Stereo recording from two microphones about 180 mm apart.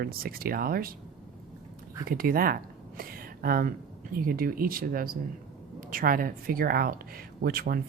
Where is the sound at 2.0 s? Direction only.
55° right (ahead or behind).